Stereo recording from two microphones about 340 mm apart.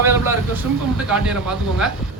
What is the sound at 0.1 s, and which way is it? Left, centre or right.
Speech, centre.